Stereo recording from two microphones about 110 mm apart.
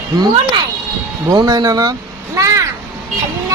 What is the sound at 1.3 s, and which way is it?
Speech, 35° right (ahead or behind).